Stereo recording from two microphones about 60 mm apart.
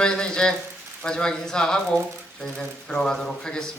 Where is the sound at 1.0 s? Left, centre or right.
Centre.